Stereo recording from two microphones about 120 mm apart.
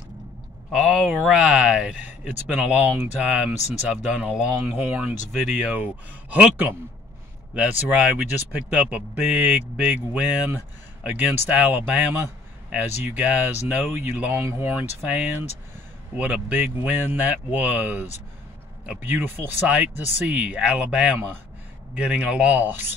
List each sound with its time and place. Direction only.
0.7 s speech: 5° right (ahead or behind)
3.5 s speech: 70° left (ahead or behind)
3.9 s speech: 10° right (ahead or behind)
16.2 s speech: 15° right (ahead or behind)